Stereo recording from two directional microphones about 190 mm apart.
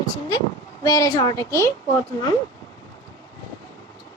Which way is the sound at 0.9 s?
20° left (ahead or behind).